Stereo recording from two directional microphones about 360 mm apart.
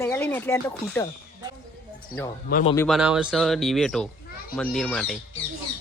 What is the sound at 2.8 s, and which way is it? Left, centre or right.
A child's voice, centre.